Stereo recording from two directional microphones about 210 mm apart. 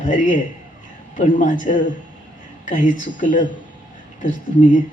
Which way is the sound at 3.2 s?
35° left (ahead or behind).